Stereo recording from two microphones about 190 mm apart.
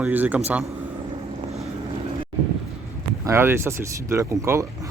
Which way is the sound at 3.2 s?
10° right (ahead or behind).